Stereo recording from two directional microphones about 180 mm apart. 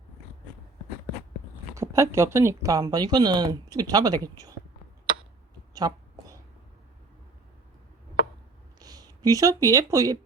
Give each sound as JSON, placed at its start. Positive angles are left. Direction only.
{"t": 1.7, "sound": "speech", "side_deg": -15}
{"t": 5.7, "sound": "a sound", "side_deg": -20}
{"t": 8.8, "sound": "speech", "side_deg": -20}